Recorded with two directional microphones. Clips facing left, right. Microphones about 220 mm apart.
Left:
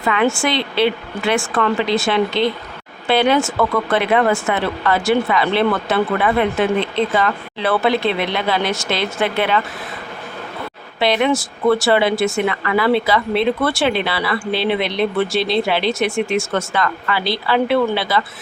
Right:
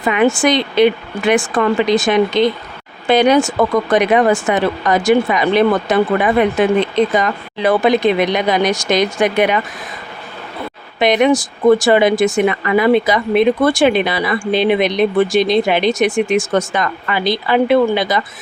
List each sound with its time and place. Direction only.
0.0 s speech: 15° right (ahead or behind)
11.0 s speech: 15° right (ahead or behind)